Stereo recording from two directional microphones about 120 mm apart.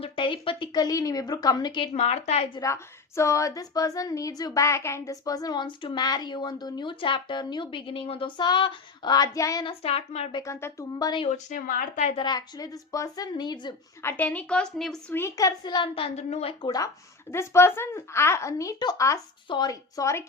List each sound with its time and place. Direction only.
0.0 s a woman's voice: 45° left (ahead or behind)
1.9 s speech: 60° left (ahead or behind)
2.6 s a woman's voice: 25° left (ahead or behind); by 8.3 s 50° left (ahead or behind)
8.4 s a woman's voice: 40° left (ahead or behind)
9.6 s speech: 55° left (ahead or behind)
10.4 s speech: 25° left (ahead or behind)
11.3 s speech: 90° left
12.1 s a woman's voice: 35° left (ahead or behind)
14.0 s a woman's voice: 15° left (ahead or behind)
15.1 s a woman's voice: 25° left (ahead or behind); by 16.7 s 50° left (ahead or behind)
17.3 s speech: 20° left (ahead or behind)